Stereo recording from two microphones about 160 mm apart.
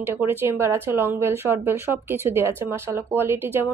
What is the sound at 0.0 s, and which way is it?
Speech, 15° right (ahead or behind).